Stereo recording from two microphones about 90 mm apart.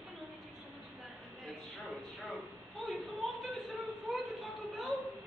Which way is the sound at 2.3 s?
Centre (ahead or behind).